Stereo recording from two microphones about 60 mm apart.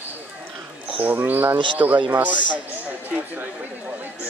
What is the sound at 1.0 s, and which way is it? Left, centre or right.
Speech, right.